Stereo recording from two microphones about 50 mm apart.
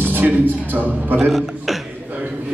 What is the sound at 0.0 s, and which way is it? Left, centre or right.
Music, right.